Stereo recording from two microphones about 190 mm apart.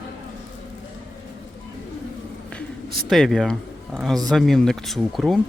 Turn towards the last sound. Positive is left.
turn(degrees=0)  # may be behind; listen again after turning